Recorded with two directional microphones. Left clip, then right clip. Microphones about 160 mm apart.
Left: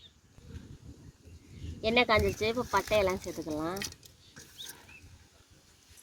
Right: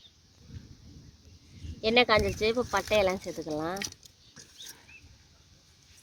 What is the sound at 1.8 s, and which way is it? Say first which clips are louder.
Speech: right 2 dB; 45° right (ahead or behind).